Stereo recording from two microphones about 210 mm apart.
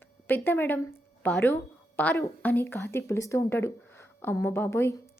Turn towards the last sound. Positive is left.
turn(degrees=10)  # may be behind; listen again after turning